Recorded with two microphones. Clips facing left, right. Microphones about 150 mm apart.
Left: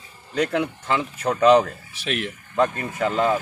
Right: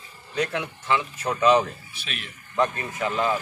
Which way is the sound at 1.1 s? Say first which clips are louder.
Left 5 dB; 60° left (ahead or behind).